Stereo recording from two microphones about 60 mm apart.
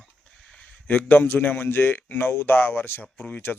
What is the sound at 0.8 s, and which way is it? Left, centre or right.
A man's voice, left.